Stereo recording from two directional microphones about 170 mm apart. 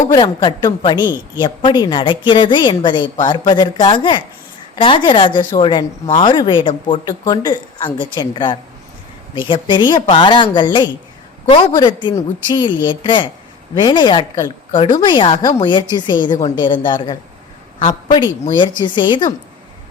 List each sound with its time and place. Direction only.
0.1 s a woman's voice: 25° left (ahead or behind)